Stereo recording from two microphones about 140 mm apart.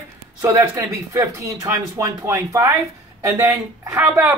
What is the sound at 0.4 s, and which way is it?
Speech, 20° right (ahead or behind).